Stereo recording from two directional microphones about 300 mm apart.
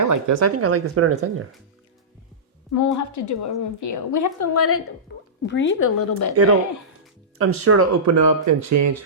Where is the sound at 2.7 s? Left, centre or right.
Left.